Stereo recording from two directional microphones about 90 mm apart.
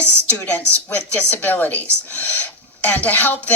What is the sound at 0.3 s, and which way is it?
A woman's voice, 15° left (ahead or behind).